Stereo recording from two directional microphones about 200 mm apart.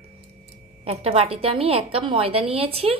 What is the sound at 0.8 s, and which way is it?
A woman's voice, 30° right (ahead or behind).